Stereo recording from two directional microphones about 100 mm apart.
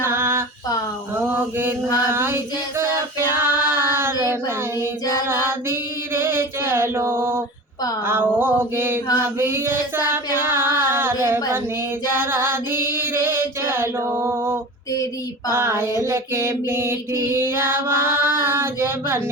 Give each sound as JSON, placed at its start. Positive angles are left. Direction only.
{"t": 0.0, "sound": "female singing", "side_deg": -25}
{"t": 2.0, "sound": "female singing", "side_deg": -25}
{"t": 4.2, "sound": "child singing", "side_deg": -25}
{"t": 5.2, "sound": "mantra", "side_deg": -25}
{"t": 8.0, "sound": "music", "side_deg": -20}
{"t": 9.1, "sound": "child singing", "side_deg": -20}
{"t": 10.3, "sound": "music", "side_deg": -20}
{"t": 15.5, "sound": "child singing", "side_deg": -25}